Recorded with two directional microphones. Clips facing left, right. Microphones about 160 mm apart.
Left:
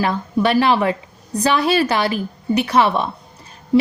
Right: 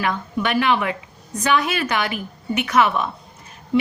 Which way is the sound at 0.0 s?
35° left (ahead or behind).